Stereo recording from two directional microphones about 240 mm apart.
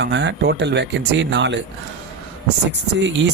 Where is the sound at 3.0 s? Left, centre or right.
Right.